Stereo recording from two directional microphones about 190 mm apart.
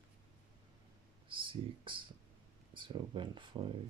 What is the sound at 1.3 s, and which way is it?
Speech, 25° right (ahead or behind).